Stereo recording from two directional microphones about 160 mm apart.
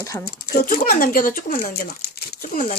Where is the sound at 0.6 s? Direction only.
60° left (ahead or behind).